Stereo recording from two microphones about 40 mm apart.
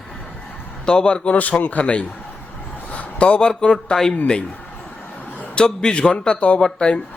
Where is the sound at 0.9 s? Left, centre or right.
Left.